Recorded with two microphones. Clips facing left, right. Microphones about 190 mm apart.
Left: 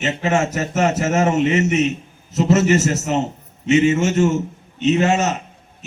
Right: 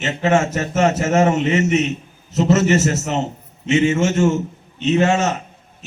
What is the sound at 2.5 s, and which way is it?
A man's voice, 15° left (ahead or behind).